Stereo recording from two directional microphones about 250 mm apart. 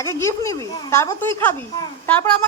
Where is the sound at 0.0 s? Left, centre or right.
Centre.